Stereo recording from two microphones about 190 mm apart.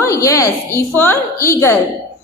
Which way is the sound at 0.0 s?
15° left (ahead or behind).